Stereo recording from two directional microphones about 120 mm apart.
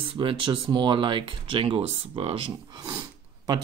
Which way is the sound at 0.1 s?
45° right (ahead or behind).